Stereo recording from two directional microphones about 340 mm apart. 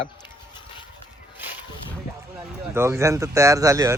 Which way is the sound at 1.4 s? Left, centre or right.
Centre.